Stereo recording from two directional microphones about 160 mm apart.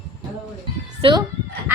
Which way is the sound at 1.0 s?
30° right (ahead or behind).